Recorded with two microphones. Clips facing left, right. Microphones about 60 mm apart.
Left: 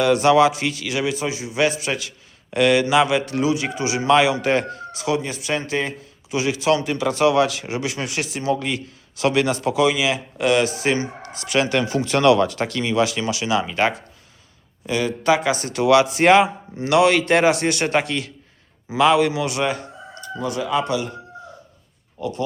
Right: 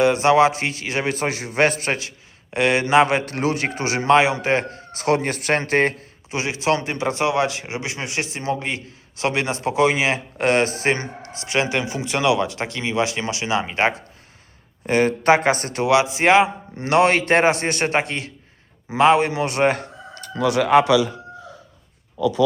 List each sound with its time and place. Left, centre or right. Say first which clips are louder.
0.0 s speech: even; right
2.0 s a man's voice: even; right
4.2 s speech: left 1 dB; right
4.9 s a man's voice: right 3 dB; right
6.3 s speech: left 2 dB; right
11.3 s speech: left 2 dB; right
11.8 s speech: left 4 dB; centre
14.8 s speech: right 3 dB; right
16.8 s speech: left 1 dB; right
20.1 s speech: right 6 dB; right